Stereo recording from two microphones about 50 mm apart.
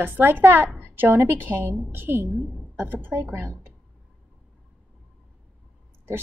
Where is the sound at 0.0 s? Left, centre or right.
Right.